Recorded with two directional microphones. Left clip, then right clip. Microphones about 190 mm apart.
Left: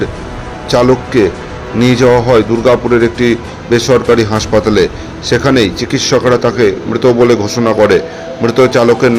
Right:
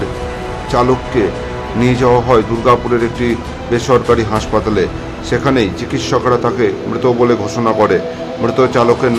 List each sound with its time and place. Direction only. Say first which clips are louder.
0.7 s speech: left 4 dB; 20° left (ahead or behind)